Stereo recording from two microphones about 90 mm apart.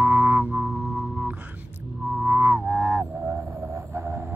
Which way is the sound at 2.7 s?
25° right (ahead or behind).